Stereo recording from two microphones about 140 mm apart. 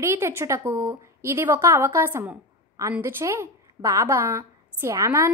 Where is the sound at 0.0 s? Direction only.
20° right (ahead or behind).